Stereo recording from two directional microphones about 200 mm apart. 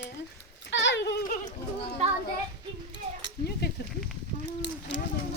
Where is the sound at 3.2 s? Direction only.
55° left (ahead or behind).